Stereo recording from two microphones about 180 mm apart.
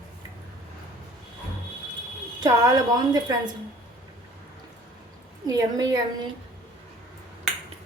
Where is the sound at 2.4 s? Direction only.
20° right (ahead or behind).